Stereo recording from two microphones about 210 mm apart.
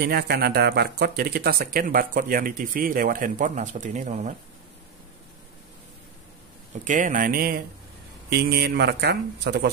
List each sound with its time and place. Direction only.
0.0 s speech: 50° right (ahead or behind)
6.8 s speech: 40° right (ahead or behind)